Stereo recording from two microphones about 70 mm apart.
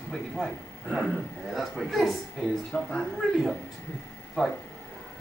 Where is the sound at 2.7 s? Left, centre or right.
Centre.